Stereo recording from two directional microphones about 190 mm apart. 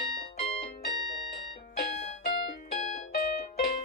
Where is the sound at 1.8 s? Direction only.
40° left (ahead or behind).